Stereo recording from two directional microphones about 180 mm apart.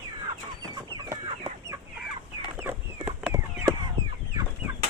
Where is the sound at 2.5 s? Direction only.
10° right (ahead or behind).